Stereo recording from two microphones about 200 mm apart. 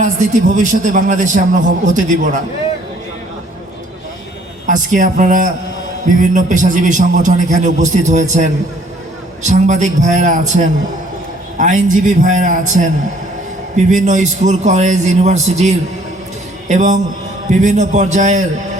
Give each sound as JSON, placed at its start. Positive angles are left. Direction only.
{"t": 0.0, "sound": "a man's voice", "side_deg": -40}
{"t": 4.6, "sound": "a man's voice", "side_deg": -40}